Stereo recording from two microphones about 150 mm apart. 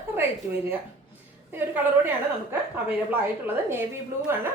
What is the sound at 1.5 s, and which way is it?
A woman's voice, 15° right (ahead or behind).